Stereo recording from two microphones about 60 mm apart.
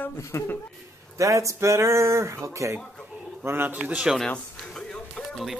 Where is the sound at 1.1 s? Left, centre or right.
Right.